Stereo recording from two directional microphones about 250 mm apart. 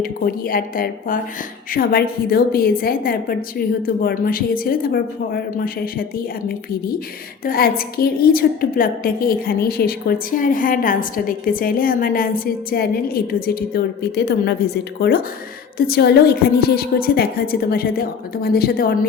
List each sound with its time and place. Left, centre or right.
0.0 s a woman's voice: left
7.4 s a woman's voice: left